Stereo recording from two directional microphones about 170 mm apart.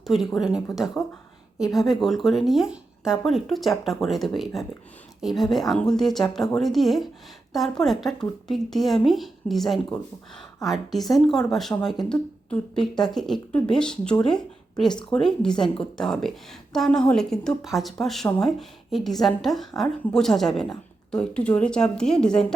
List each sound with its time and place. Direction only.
0.1 s a woman's voice: centre (ahead or behind)